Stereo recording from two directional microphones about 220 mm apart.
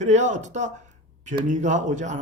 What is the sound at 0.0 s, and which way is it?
A man's voice, 35° right (ahead or behind).